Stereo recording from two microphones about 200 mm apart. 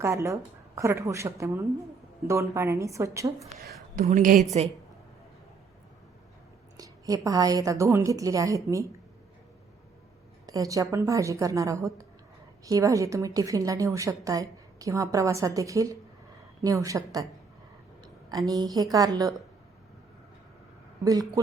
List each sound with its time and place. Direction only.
0.0 s a woman's voice: 15° right (ahead or behind)
4.0 s a woman's voice: 40° right (ahead or behind)
6.7 s a woman's voice: 15° right (ahead or behind)
10.4 s a woman's voice: 15° right (ahead or behind)
21.0 s a woman's voice: 20° right (ahead or behind)